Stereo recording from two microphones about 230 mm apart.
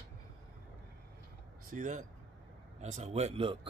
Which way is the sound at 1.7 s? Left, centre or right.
Right.